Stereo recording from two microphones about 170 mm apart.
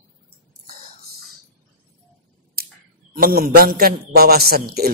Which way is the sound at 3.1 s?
60° right (ahead or behind).